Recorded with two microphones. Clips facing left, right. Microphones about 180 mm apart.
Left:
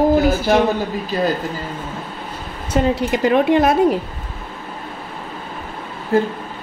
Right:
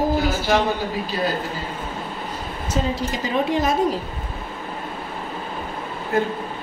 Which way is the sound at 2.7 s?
60° left (ahead or behind).